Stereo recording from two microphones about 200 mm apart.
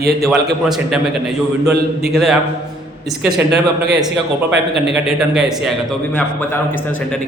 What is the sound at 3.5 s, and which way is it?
Speech, 55° right (ahead or behind).